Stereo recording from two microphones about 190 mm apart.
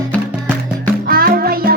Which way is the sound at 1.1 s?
50° right (ahead or behind).